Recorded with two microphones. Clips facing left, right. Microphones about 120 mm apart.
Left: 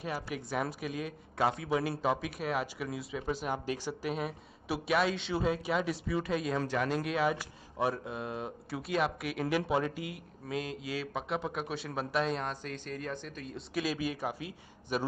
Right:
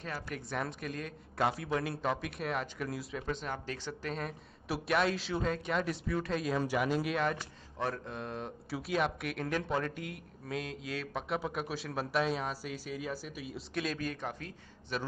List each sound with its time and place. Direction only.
0.0 s speech: 10° left (ahead or behind)